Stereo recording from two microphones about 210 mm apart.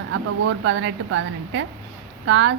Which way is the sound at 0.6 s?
65° right (ahead or behind).